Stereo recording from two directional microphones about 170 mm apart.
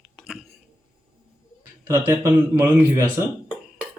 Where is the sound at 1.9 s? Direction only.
15° right (ahead or behind).